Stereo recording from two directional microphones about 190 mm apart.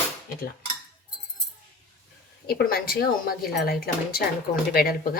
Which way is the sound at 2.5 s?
55° left (ahead or behind).